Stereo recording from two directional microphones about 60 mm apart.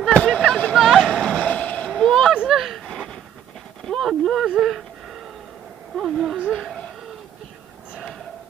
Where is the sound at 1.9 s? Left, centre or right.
Centre.